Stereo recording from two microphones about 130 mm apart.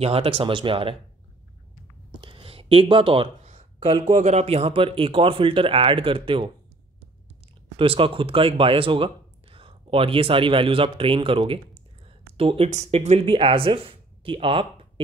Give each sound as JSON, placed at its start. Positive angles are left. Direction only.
{"t": 0.0, "sound": "speech", "side_deg": -50}
{"t": 2.1, "sound": "a sound", "side_deg": -40}
{"t": 3.4, "sound": "speech", "side_deg": -50}
{"t": 7.7, "sound": "speech", "side_deg": -45}
{"t": 12.6, "sound": "speech", "side_deg": -65}